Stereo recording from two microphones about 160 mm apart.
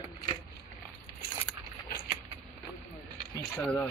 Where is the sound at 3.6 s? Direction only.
5° left (ahead or behind).